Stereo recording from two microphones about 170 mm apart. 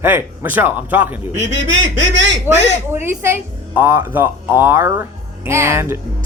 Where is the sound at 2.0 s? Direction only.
90° right.